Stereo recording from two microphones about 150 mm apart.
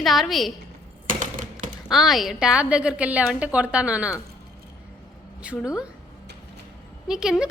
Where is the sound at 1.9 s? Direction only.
Centre (ahead or behind).